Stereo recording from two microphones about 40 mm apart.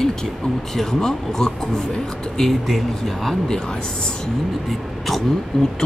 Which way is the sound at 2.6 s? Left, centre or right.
Centre.